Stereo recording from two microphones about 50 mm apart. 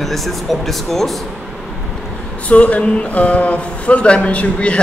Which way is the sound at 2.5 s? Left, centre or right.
Left.